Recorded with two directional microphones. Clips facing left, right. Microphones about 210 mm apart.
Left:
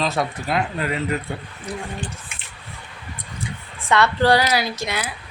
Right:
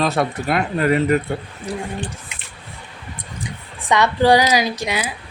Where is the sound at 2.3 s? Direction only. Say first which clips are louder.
Right 2 dB; 20° right (ahead or behind).